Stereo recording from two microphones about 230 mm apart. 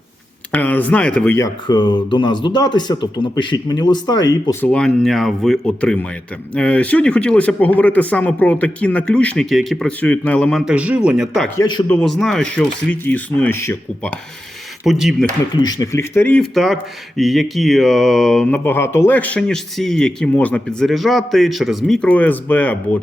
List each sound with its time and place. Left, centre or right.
0.5 s speech: centre
4.7 s speech: centre
11.5 s speech: centre
11.9 s speech: centre
15.5 s speech: centre